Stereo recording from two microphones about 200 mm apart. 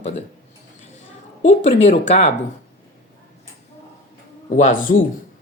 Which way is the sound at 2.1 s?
35° left (ahead or behind).